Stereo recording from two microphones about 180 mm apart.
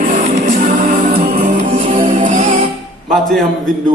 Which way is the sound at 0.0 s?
50° right (ahead or behind).